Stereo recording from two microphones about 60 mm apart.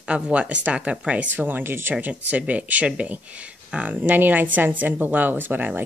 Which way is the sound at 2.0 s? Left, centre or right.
Right.